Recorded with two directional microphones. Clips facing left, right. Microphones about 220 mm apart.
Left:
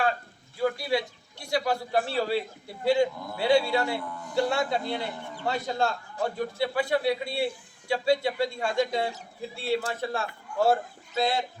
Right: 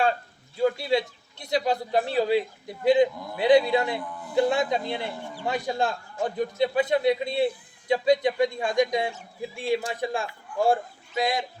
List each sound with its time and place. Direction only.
0.6 s a man's voice: 25° right (ahead or behind)